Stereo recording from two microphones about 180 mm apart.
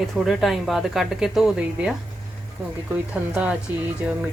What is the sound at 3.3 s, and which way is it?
Speech, 5° right (ahead or behind).